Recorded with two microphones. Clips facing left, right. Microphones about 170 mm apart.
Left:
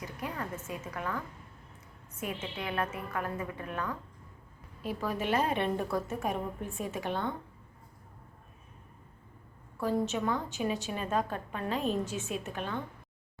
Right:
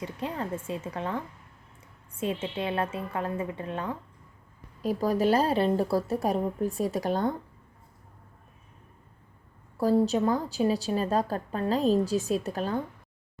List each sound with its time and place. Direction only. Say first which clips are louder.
0.0 s a woman's voice: right 5 dB; 25° right (ahead or behind)
4.8 s a woman's voice: right 8 dB; 40° right (ahead or behind)
9.7 s a woman's voice: right 7 dB; 35° right (ahead or behind)